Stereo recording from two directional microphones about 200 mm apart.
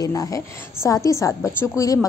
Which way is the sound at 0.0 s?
15° left (ahead or behind).